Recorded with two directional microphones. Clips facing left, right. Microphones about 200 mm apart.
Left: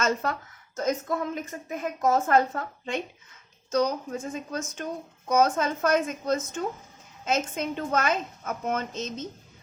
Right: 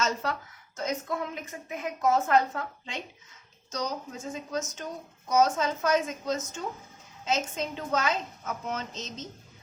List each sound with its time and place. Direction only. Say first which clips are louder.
0.0 s a woman's voice: left 3 dB; 50° left (ahead or behind)